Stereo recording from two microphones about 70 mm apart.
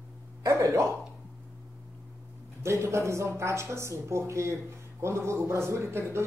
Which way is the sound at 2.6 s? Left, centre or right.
Right.